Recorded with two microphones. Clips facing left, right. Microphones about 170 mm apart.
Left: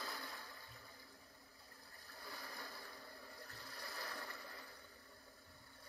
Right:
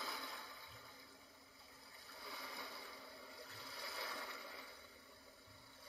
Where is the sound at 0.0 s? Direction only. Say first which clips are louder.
Even; centre (ahead or behind).